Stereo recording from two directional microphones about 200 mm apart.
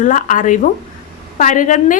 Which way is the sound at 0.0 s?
40° left (ahead or behind).